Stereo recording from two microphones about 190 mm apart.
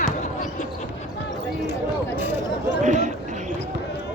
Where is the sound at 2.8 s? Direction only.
40° right (ahead or behind).